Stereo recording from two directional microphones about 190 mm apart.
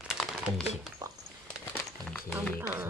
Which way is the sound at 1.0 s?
20° right (ahead or behind).